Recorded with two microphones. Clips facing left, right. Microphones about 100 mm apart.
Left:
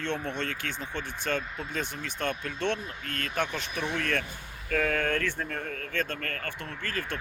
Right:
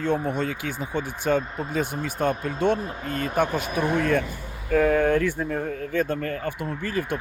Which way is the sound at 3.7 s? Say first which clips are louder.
Right 8 dB; 50° right (ahead or behind).